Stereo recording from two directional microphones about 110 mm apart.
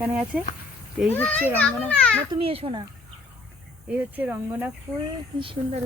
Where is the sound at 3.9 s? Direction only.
15° right (ahead or behind).